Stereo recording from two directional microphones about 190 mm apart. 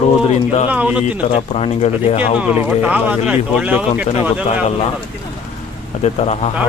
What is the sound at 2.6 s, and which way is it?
Speech, 5° right (ahead or behind).